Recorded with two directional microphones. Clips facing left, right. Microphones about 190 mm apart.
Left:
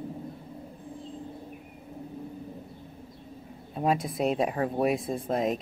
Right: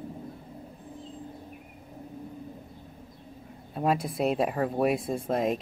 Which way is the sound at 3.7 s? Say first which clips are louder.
Even; centre (ahead or behind).